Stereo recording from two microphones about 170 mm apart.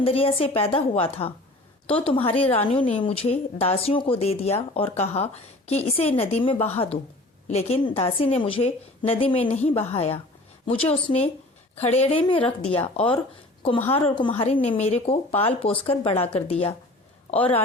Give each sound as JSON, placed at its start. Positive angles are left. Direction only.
{"t": 0.0, "sound": "speech", "side_deg": 35}